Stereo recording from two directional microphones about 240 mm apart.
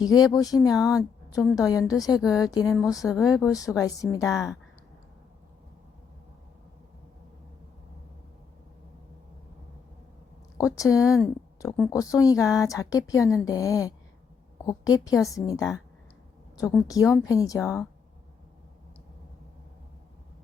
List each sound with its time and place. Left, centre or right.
0.0 s a woman's voice: centre
3.0 s speech: centre
3.3 s a woman's voice: centre
10.8 s a woman's voice: centre